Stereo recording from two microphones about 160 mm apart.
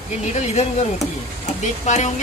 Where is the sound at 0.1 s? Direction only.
45° left (ahead or behind).